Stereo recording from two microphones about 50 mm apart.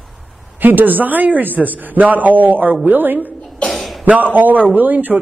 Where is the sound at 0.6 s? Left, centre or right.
Right.